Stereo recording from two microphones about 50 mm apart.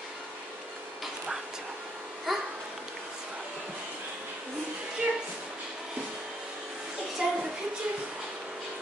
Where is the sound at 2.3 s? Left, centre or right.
Centre.